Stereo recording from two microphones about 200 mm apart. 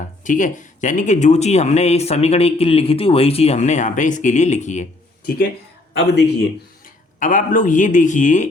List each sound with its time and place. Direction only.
0.3 s speech: 40° left (ahead or behind)
5.9 s speech: 60° left (ahead or behind)
6.8 s speech: 40° left (ahead or behind)